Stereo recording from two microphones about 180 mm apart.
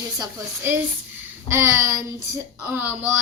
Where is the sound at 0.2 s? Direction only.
15° right (ahead or behind).